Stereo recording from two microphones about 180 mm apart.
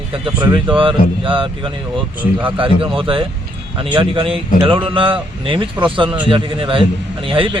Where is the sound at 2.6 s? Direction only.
30° right (ahead or behind).